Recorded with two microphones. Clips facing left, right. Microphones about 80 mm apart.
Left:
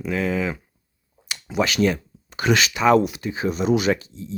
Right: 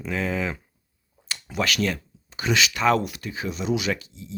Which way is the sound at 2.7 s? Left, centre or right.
Centre.